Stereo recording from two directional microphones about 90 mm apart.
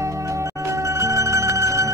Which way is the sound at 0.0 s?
35° right (ahead or behind).